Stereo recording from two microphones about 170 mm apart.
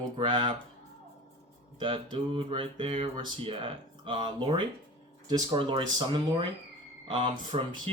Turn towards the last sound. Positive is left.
turn(degrees=-30)  # may be behind; listen again after turning